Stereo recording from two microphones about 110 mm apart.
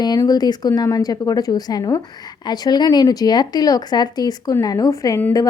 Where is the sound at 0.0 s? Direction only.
35° left (ahead or behind).